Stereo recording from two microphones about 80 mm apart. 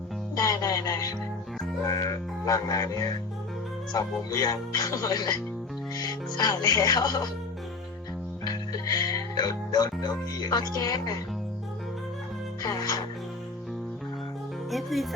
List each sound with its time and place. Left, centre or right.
0.3 s music: left
1.9 s speech: left
8.4 s speech: left
12.6 s speech: left
14.7 s speech: centre